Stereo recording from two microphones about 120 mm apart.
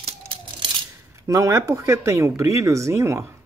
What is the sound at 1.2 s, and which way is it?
Speech, 25° right (ahead or behind).